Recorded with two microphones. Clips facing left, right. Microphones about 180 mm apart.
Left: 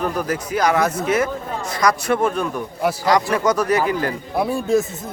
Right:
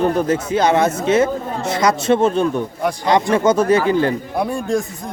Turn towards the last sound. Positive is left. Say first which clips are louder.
# left 1 dB
turn(degrees=5)  # may be behind; listen again after turning